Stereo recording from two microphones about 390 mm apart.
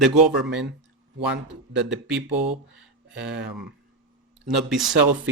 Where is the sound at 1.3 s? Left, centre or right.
Right.